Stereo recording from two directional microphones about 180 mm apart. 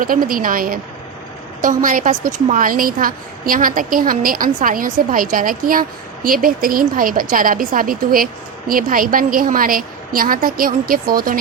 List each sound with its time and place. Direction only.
0.0 s a woman's voice: 50° right (ahead or behind)